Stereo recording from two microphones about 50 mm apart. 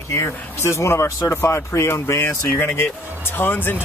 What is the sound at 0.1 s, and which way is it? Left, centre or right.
Speech, left.